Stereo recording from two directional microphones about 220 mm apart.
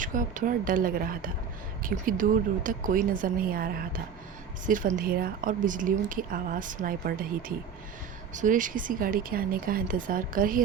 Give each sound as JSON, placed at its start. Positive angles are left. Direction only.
{"t": 0.0, "sound": "a woman's voice", "side_deg": -35}